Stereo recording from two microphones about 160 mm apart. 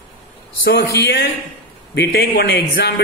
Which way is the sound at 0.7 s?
90° left.